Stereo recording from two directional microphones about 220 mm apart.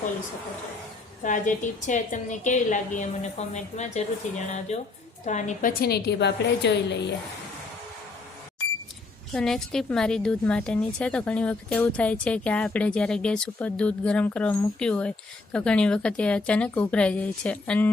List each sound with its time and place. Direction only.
1.2 s a woman's voice: 35° left (ahead or behind); by 7.1 s 50° left (ahead or behind)
9.3 s a woman's voice: centre (ahead or behind)